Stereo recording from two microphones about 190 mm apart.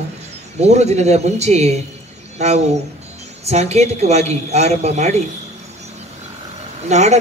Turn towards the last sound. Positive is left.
turn(degrees=-35)  # may be behind; listen again after turning